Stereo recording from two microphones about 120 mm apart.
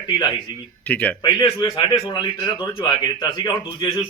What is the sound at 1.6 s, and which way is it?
A man's voice, 40° left (ahead or behind).